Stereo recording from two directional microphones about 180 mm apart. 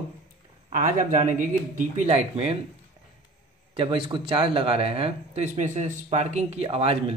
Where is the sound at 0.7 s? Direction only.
45° right (ahead or behind).